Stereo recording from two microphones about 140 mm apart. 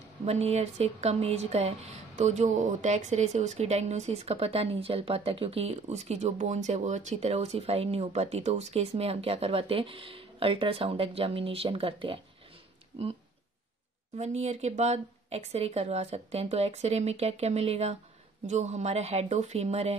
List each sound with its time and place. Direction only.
0.2 s speech: 50° right (ahead or behind)
14.1 s speech: 55° right (ahead or behind)